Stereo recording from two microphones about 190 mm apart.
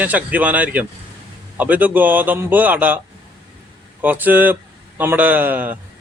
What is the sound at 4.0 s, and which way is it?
A man's voice, 10° right (ahead or behind).